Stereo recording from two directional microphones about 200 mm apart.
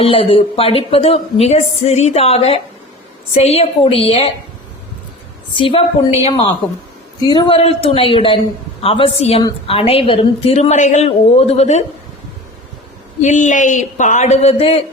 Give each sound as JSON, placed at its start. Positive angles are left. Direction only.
{"t": 0.0, "sound": "a woman's voice", "side_deg": 25}
{"t": 5.5, "sound": "a woman's voice", "side_deg": 25}
{"t": 13.2, "sound": "a woman's voice", "side_deg": 40}